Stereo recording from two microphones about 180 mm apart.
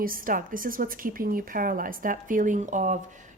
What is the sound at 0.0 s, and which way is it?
Speech, 50° right (ahead or behind).